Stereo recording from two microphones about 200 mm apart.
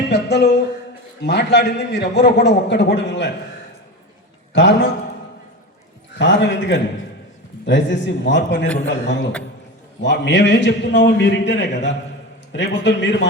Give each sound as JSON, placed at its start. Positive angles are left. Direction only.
{"t": 0.1, "sound": "a sound", "side_deg": 60}
{"t": 1.2, "sound": "a man's voice", "side_deg": 60}
{"t": 4.5, "sound": "a man's voice", "side_deg": 65}
{"t": 6.1, "sound": "a man's voice", "side_deg": 65}